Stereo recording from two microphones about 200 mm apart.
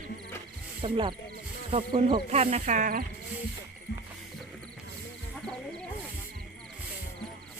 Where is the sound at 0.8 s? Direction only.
25° right (ahead or behind).